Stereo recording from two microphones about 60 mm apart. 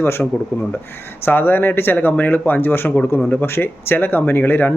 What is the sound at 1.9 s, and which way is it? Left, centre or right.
Speech, left.